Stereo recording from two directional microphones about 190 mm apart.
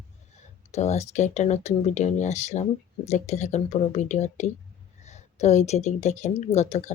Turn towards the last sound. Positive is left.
turn(degrees=35)  # may be behind; listen again after turning